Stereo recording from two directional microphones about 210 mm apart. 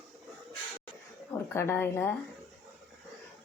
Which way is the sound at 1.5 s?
10° left (ahead or behind).